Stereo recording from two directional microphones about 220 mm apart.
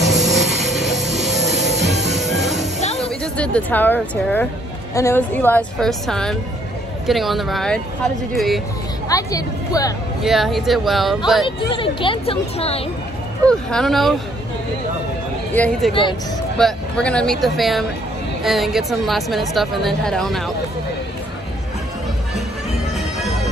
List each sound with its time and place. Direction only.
0.0 s train: centre (ahead or behind)
1.1 s music: centre (ahead or behind)
3.0 s a woman's voice: 5° left (ahead or behind)
9.1 s a woman's voice: 15° left (ahead or behind)
10.2 s a woman's voice: centre (ahead or behind)
11.4 s speech: 25° left (ahead or behind)
13.5 s a woman's voice: 5° left (ahead or behind)
15.5 s a woman's voice: 5° left (ahead or behind)
15.9 s speech: 20° left (ahead or behind)
16.5 s a woman's voice: 5° left (ahead or behind)
22.9 s music: centre (ahead or behind)